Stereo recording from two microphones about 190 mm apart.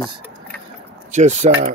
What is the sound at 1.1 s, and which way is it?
Speech, 40° right (ahead or behind).